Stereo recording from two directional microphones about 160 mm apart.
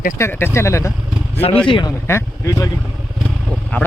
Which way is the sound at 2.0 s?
20° left (ahead or behind).